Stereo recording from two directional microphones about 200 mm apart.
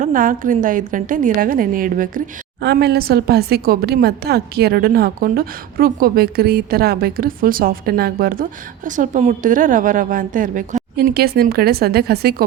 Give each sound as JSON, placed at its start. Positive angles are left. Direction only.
{"t": 0.0, "sound": "a woman's voice", "side_deg": -45}
{"t": 10.9, "sound": "a woman's voice", "side_deg": -50}